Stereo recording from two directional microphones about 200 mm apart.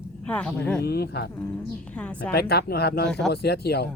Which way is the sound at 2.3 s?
50° left (ahead or behind).